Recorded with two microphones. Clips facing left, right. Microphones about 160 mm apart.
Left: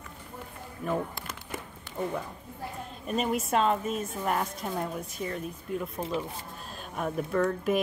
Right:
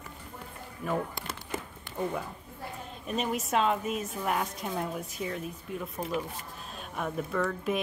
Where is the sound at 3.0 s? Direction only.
Centre (ahead or behind).